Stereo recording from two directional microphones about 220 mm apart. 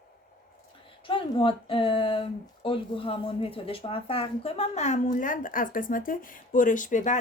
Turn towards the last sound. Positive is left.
turn(degrees=35)  # may be behind; listen again after turning